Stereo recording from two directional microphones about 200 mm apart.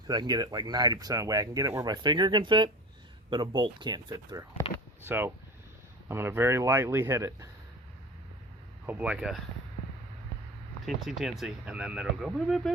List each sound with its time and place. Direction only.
0.1 s speech: 20° right (ahead or behind)
5.0 s speech: 10° right (ahead or behind)
8.9 s speech: 5° right (ahead or behind)
10.8 s speech: centre (ahead or behind)